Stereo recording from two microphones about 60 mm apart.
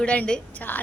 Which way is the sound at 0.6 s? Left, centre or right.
Left.